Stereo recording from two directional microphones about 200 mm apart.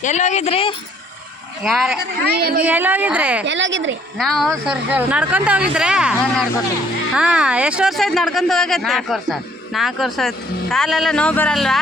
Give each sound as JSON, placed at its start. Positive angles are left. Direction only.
{"t": 0.0, "sound": "speech", "side_deg": 35}
{"t": 1.6, "sound": "speech", "side_deg": 0}
{"t": 2.2, "sound": "a woman's voice", "side_deg": -50}
{"t": 2.6, "sound": "a woman's voice", "side_deg": -10}
{"t": 3.4, "sound": "a woman's voice", "side_deg": -65}
{"t": 4.2, "sound": "speech", "side_deg": 0}